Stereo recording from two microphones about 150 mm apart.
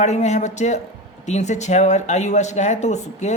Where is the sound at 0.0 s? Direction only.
50° left (ahead or behind).